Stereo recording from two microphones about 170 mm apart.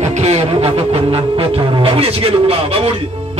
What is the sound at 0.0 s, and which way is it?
Music, 40° right (ahead or behind).